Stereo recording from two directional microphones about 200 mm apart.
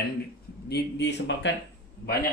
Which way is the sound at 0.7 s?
60° left (ahead or behind).